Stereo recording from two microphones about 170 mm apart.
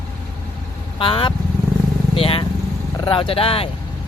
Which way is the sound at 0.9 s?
30° left (ahead or behind).